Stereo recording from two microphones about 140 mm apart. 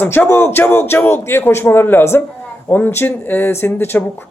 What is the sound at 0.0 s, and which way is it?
Speech, 15° left (ahead or behind).